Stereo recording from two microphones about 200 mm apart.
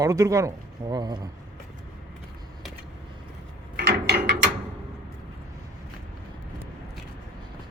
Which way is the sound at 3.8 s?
55° right (ahead or behind).